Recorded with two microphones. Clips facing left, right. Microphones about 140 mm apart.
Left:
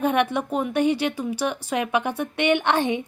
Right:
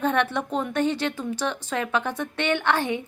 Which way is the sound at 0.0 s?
10° left (ahead or behind).